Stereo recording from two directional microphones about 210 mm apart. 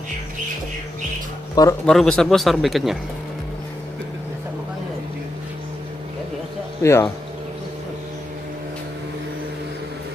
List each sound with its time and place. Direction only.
1.5 s speech: 15° left (ahead or behind)
1.9 s speech: 5° left (ahead or behind)
6.8 s speech: 10° left (ahead or behind)